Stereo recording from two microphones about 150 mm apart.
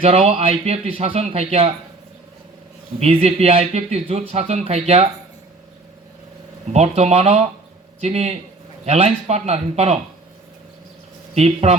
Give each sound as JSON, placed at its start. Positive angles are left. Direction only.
{"t": 0.0, "sound": "speech", "side_deg": -40}
{"t": 3.0, "sound": "speech", "side_deg": -45}
{"t": 6.7, "sound": "speech", "side_deg": -45}
{"t": 11.3, "sound": "speech", "side_deg": -45}